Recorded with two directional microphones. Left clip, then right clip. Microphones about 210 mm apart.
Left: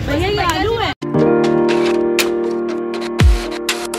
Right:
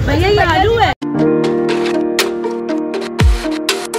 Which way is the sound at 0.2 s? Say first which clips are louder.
Right 6 dB; 50° right (ahead or behind).